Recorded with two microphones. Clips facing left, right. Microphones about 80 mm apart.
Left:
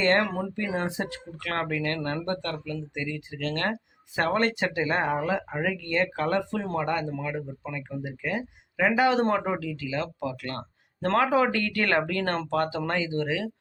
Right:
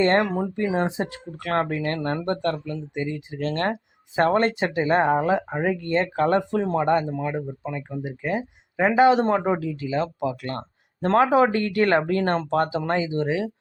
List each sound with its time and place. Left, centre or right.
0.0 s speech: right